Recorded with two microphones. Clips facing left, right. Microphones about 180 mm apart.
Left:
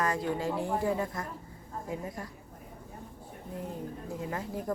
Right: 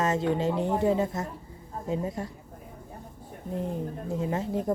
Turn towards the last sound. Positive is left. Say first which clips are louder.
# right 7 dB
turn(degrees=-25)  # may be behind; listen again after turning